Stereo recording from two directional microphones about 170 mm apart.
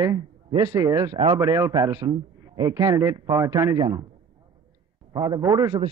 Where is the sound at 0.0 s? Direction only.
25° right (ahead or behind).